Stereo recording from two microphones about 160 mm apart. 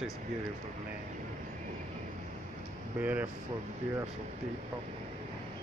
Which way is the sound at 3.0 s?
10° right (ahead or behind).